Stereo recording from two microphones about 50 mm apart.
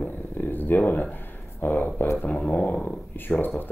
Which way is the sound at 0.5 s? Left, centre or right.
Left.